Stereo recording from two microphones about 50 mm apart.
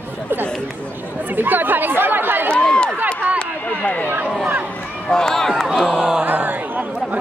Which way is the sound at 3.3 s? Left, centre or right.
Left.